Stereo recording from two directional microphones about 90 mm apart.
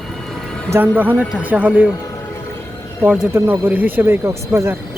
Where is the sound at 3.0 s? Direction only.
10° right (ahead or behind).